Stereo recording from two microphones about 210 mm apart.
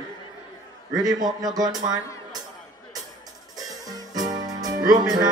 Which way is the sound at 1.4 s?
20° right (ahead or behind).